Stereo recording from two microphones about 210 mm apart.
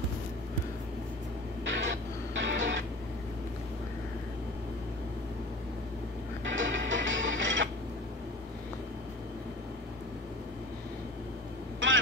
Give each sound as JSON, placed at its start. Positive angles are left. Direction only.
{"t": 1.7, "sound": "music", "side_deg": -60}
{"t": 6.4, "sound": "music", "side_deg": -65}
{"t": 11.8, "sound": "vehicle", "side_deg": -65}